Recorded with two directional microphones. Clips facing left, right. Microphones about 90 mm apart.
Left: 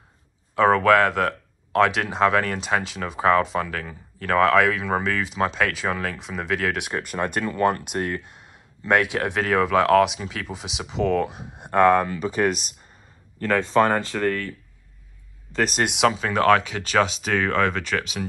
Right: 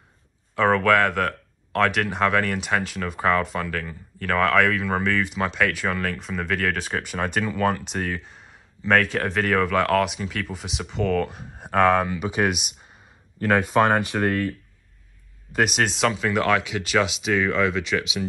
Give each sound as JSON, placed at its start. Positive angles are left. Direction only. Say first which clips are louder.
{"t": 0.6, "sound": "speech", "louder": "left 2 dB", "side_deg": 30}
{"t": 6.9, "sound": "speech", "louder": "left 1 dB", "side_deg": 0}
{"t": 11.6, "sound": "speech", "louder": "left 2 dB", "side_deg": 0}
{"t": 15.5, "sound": "speech", "louder": "right 1 dB", "side_deg": -5}
{"t": 16.2, "sound": "speech", "louder": "left 3 dB", "side_deg": 35}